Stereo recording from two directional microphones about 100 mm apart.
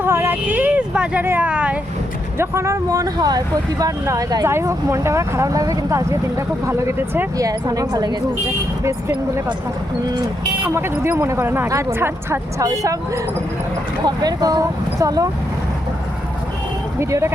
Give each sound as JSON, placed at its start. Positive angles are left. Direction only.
{"t": 0.0, "sound": "a sound", "side_deg": -25}
{"t": 2.4, "sound": "speech", "side_deg": -25}
{"t": 4.4, "sound": "speech", "side_deg": -25}
{"t": 7.3, "sound": "speech", "side_deg": -40}
{"t": 8.8, "sound": "speech", "side_deg": -30}
{"t": 10.6, "sound": "speech", "side_deg": -25}
{"t": 12.6, "sound": "speech", "side_deg": -35}
{"t": 14.0, "sound": "speech", "side_deg": -40}
{"t": 17.0, "sound": "speech", "side_deg": -30}